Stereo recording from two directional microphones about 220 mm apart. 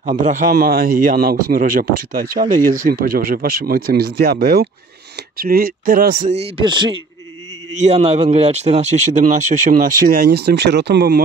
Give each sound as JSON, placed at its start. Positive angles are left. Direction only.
{"t": 0.0, "sound": "a man's voice", "side_deg": -35}
{"t": 6.4, "sound": "a man's voice", "side_deg": -20}